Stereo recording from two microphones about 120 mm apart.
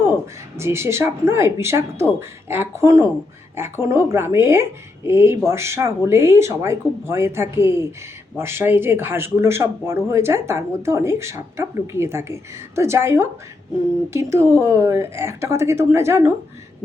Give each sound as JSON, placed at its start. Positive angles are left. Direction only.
{"t": 0.5, "sound": "speech", "side_deg": -20}